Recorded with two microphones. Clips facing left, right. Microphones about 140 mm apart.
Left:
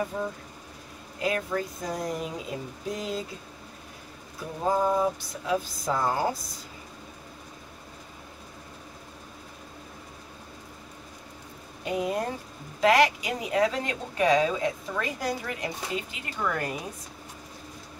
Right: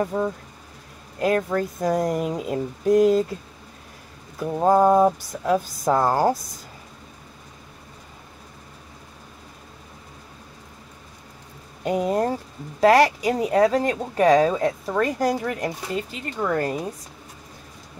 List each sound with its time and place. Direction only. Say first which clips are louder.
1.2 s speech: right 7 dB; 50° right (ahead or behind)
4.6 s a sound: right 8 dB; 65° right (ahead or behind)
5.0 s speech: right 8 dB; 45° right (ahead or behind)
11.8 s speech: right 6 dB; 40° right (ahead or behind)